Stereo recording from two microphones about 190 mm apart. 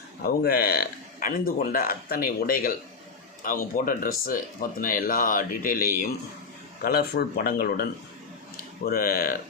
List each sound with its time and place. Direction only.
0.2 s speech: 55° left (ahead or behind)